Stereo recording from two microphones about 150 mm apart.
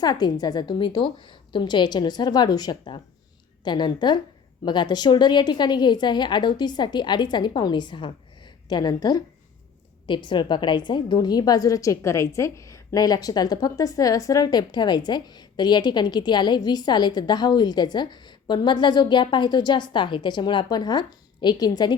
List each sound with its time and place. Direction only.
0.0 s a woman's voice: 25° left (ahead or behind)